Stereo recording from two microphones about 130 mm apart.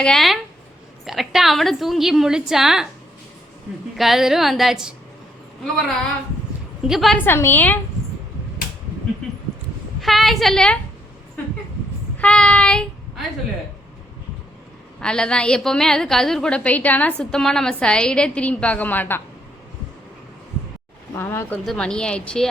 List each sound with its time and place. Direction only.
0.0 s a woman's voice: 5° left (ahead or behind)
3.9 s a woman's voice: centre (ahead or behind)
6.8 s a woman's voice: centre (ahead or behind)
7.3 s a woman's voice: 15° left (ahead or behind)
10.0 s a woman's voice: centre (ahead or behind)
11.4 s a sound: 15° left (ahead or behind)
12.1 s child singing: 10° left (ahead or behind)
15.0 s a woman's voice: 5° left (ahead or behind)
21.2 s speech: 20° left (ahead or behind)
21.6 s a woman's voice: 5° left (ahead or behind)